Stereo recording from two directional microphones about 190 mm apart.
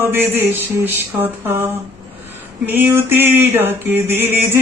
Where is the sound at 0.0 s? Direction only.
10° right (ahead or behind).